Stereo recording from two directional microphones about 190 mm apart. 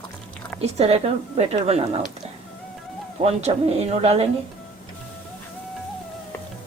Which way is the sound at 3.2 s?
35° right (ahead or behind).